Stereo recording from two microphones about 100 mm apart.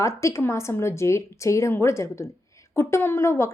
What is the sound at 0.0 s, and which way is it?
Speech, 30° left (ahead or behind).